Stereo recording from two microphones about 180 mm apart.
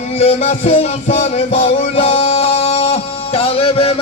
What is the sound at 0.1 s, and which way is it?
Music, 35° left (ahead or behind).